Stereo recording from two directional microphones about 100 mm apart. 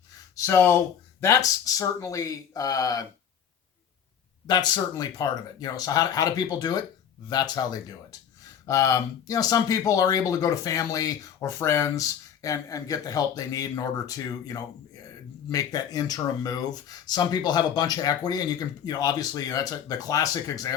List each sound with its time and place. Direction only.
0.3 s speech: 25° left (ahead or behind)
4.4 s speech: 45° left (ahead or behind)